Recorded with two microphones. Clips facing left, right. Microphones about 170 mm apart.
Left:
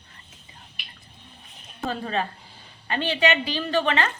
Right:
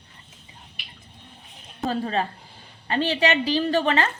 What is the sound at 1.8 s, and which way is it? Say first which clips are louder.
A woman's voice: right 2 dB; 35° right (ahead or behind).